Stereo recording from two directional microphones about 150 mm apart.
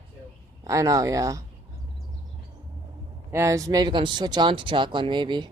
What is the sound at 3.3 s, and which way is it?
Speech, 20° right (ahead or behind).